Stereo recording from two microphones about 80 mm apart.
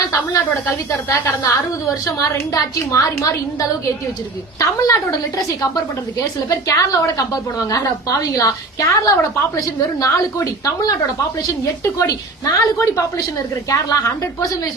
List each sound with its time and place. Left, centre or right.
1.0 s a woman's voice: left
6.5 s a woman's voice: left